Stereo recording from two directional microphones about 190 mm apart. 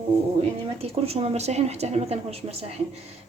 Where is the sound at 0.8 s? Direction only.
30° right (ahead or behind).